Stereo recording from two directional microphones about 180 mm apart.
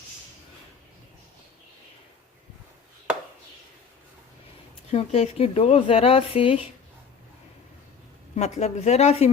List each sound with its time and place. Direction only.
4.9 s speech: 35° left (ahead or behind)
8.4 s speech: 40° left (ahead or behind)